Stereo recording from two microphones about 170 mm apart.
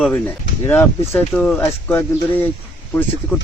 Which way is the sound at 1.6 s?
15° left (ahead or behind).